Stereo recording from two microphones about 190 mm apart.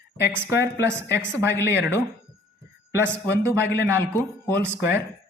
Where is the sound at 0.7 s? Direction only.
15° right (ahead or behind).